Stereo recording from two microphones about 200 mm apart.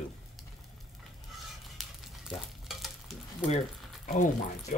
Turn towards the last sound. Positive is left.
turn(degrees=40)  # may be behind; listen again after turning